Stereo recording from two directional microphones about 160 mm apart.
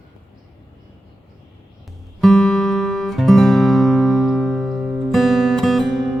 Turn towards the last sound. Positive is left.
turn(degrees=0)  # may be behind; listen again after turning